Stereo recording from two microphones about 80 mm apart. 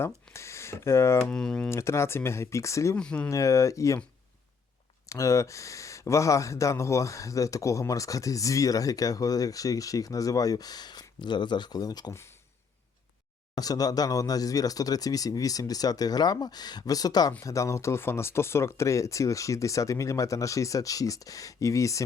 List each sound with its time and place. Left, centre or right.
0.3 s speech: left
1.3 s speech: centre
1.7 s speech: left
3.0 s speech: centre
3.2 s speech: left
5.0 s speech: left
13.6 s speech: left
17.4 s speech: left